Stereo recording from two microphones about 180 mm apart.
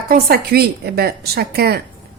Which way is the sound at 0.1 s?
60° right (ahead or behind).